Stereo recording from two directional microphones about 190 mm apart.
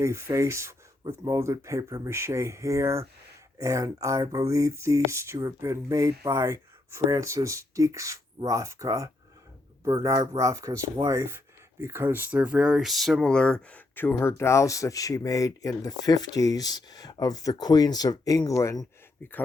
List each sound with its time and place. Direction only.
0.0 s speech: 15° right (ahead or behind); by 18.9 s 15° left (ahead or behind)